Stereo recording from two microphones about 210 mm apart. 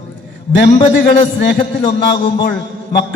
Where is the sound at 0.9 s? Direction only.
55° left (ahead or behind).